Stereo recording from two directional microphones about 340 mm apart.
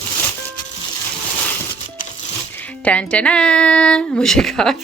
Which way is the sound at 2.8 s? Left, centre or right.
Centre.